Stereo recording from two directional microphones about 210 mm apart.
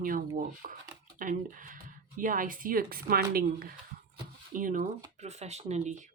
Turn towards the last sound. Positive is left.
turn(degrees=-35)  # may be behind; listen again after turning